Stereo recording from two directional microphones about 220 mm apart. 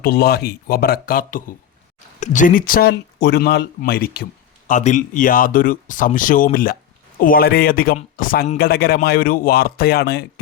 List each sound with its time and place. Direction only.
0.0 s speech: 45° left (ahead or behind)
4.7 s speech: 35° left (ahead or behind)